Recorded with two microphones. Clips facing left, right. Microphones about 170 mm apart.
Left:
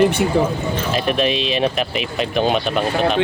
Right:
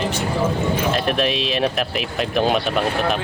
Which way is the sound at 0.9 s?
Centre (ahead or behind).